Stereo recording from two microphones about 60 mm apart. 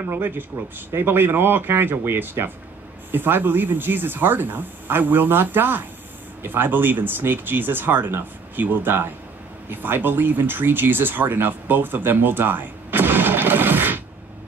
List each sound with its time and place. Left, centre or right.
0.1 s speech: right